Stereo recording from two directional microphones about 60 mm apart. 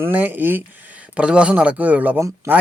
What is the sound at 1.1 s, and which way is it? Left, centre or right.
Speech, centre.